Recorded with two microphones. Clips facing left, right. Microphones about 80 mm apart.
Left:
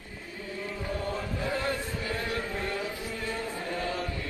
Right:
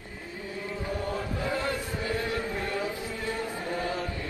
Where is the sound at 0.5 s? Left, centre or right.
Right.